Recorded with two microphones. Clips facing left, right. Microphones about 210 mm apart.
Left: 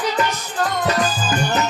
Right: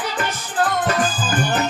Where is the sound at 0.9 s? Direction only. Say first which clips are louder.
Left 1 dB; 50° right (ahead or behind).